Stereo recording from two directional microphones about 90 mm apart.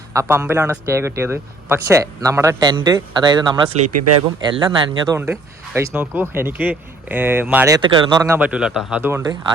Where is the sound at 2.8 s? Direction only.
55° right (ahead or behind).